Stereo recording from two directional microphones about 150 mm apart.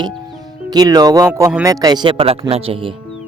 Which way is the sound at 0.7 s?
25° right (ahead or behind).